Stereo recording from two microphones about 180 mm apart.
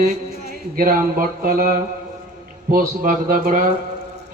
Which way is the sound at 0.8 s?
50° right (ahead or behind).